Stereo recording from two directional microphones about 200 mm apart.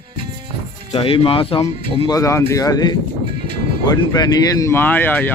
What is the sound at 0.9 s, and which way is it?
Speech, 30° left (ahead or behind).